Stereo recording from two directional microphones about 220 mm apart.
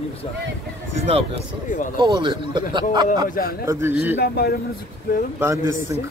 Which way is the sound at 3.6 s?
10° right (ahead or behind).